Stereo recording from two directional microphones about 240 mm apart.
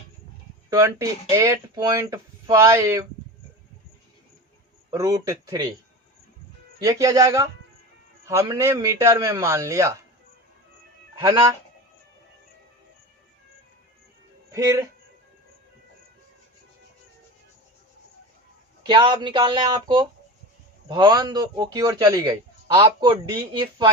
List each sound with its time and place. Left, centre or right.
0.7 s a man's voice: centre
4.9 s a man's voice: centre
6.8 s a man's voice: centre
11.2 s a man's voice: centre
14.5 s a man's voice: centre
18.9 s a man's voice: centre